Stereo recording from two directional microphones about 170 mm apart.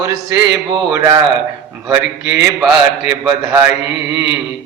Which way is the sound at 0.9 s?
20° right (ahead or behind).